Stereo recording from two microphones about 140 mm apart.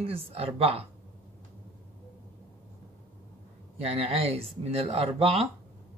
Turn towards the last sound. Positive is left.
turn(degrees=-45)  # may be behind; listen again after turning